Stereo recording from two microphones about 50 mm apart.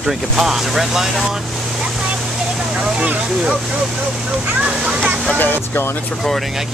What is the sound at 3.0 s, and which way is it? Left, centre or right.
Speech, right.